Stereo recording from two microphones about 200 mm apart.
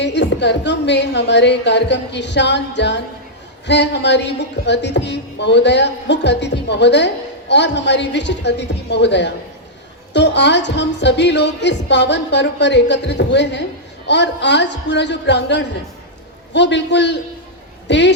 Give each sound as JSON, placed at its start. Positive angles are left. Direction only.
{"t": 0.0, "sound": "a woman's voice", "side_deg": 60}